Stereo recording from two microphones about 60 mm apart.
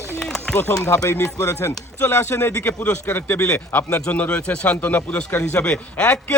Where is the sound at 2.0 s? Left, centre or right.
Left.